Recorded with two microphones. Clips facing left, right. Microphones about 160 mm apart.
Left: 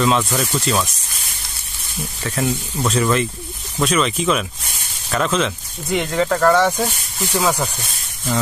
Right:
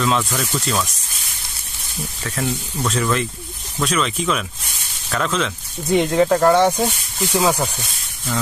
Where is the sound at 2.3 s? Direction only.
20° left (ahead or behind).